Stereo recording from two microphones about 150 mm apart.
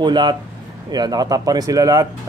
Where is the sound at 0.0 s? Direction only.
30° right (ahead or behind).